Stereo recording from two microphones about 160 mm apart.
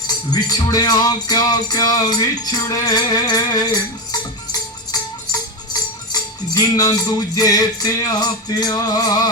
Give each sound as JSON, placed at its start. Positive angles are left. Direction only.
{"t": 0.3, "sound": "music", "side_deg": 25}